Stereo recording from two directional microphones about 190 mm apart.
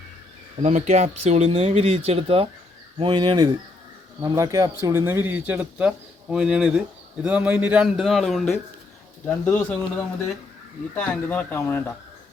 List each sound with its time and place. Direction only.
0.6 s speech: 35° right (ahead or behind); by 9.7 s 10° left (ahead or behind)
10.9 s speech: 10° left (ahead or behind)